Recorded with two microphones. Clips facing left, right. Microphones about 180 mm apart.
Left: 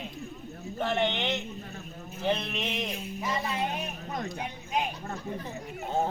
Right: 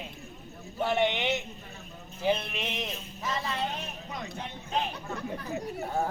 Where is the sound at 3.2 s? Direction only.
15° left (ahead or behind).